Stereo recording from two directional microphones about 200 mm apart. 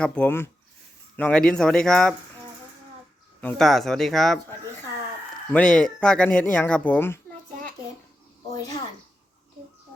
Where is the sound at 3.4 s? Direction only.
Centre (ahead or behind).